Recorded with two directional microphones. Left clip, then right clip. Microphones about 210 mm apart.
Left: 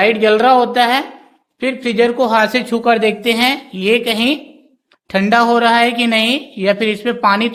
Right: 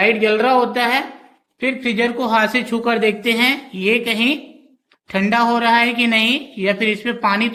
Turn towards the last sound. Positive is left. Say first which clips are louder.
# left 4 dB
turn(degrees=15)  # may be behind; listen again after turning